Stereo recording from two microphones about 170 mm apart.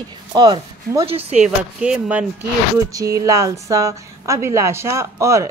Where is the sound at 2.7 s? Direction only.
20° right (ahead or behind).